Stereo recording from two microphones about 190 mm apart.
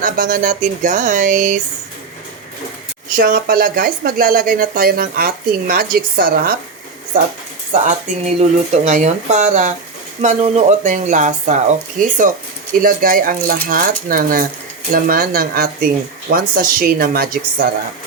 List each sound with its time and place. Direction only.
0.0 s speech: 45° right (ahead or behind)
3.1 s speech: 50° right (ahead or behind)
7.7 s speech: 40° right (ahead or behind)